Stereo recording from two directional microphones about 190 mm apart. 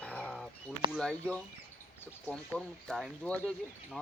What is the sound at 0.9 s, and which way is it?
Speech, 5° left (ahead or behind).